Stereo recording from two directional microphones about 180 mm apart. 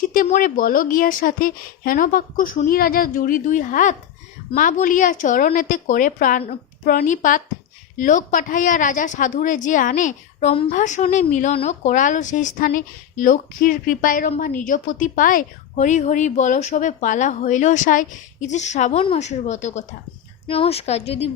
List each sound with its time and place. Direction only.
0.1 s a woman's voice: 50° left (ahead or behind)